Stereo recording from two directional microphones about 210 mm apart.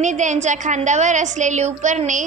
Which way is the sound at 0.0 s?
35° right (ahead or behind).